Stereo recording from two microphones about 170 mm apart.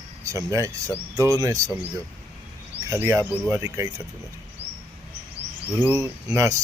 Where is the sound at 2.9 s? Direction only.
15° right (ahead or behind).